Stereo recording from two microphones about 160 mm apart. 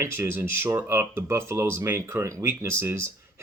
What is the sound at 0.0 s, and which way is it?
Speech, 15° right (ahead or behind).